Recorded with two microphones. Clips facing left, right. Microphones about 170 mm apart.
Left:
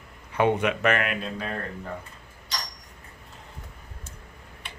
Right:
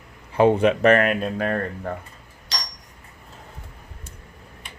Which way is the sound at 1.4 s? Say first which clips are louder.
Right 8 dB; 60° right (ahead or behind).